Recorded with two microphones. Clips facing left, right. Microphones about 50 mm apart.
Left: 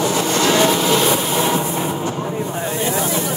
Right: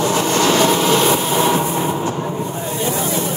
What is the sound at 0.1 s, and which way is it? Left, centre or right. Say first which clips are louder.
Vehicle: right 2 dB; right.